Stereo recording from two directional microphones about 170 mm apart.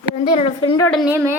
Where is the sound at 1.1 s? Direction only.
15° right (ahead or behind).